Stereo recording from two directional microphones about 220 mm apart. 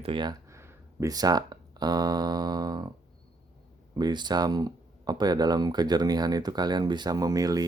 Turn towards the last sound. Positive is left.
turn(degrees=-15)  # may be behind; listen again after turning